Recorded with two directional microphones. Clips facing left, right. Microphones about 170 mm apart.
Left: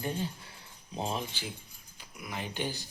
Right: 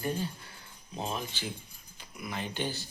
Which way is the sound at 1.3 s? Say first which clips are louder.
Right 3 dB; 10° left (ahead or behind).